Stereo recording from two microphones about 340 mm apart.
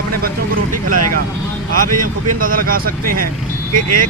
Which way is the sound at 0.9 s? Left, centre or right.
Right.